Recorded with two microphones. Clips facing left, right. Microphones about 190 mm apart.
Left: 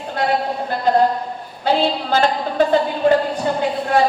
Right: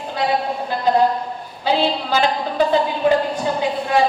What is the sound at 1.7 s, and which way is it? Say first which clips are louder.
Speech: left 1 dB; 45° left (ahead or behind).